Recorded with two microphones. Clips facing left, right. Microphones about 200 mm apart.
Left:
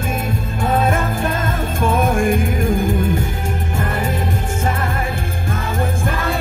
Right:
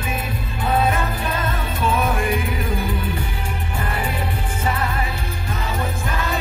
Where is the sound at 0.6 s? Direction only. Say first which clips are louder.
Left 2 dB; 50° left (ahead or behind).